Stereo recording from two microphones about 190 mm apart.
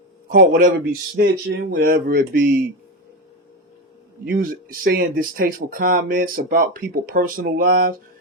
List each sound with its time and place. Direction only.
0.3 s speech: 45° right (ahead or behind)
1.1 s speech: 65° right (ahead or behind)
1.8 s speech: 50° right (ahead or behind)
4.3 s speech: 50° right (ahead or behind)